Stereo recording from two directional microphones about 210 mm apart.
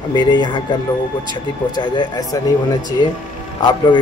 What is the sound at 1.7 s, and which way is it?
Speech, 20° left (ahead or behind).